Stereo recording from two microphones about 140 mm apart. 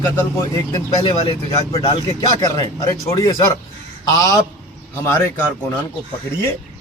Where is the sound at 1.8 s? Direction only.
35° left (ahead or behind).